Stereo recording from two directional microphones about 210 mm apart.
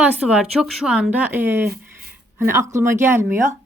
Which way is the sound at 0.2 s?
5° right (ahead or behind).